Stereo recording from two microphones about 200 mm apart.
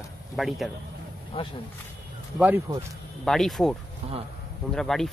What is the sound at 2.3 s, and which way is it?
Speech, 10° right (ahead or behind).